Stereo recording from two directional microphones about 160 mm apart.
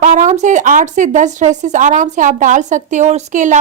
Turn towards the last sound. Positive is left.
turn(degrees=-50)  # may be behind; listen again after turning